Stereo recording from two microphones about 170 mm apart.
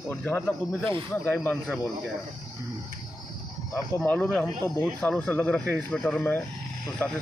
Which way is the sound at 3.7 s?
15° left (ahead or behind).